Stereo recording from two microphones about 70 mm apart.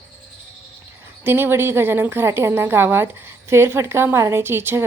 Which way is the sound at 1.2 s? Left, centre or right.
Right.